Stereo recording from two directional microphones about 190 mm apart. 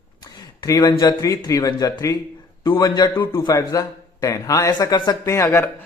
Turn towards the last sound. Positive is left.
turn(degrees=15)  # may be behind; listen again after turning